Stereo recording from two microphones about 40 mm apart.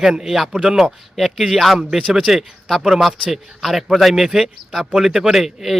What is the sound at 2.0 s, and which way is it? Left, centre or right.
Speech, centre.